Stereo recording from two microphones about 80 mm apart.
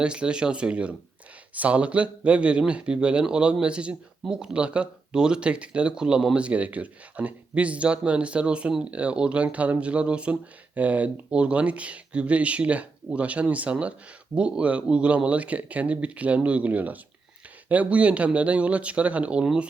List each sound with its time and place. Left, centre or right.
0.0 s speech: centre